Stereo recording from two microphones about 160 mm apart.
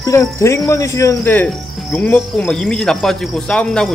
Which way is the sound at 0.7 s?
20° left (ahead or behind).